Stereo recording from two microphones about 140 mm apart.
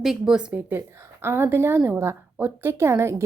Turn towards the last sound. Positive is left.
turn(degrees=-20)  # may be behind; listen again after turning